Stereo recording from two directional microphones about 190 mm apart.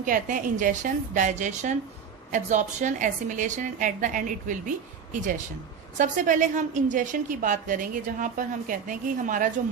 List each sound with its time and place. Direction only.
0.0 s a woman's voice: 45° right (ahead or behind)
6.0 s a woman's voice: 40° right (ahead or behind)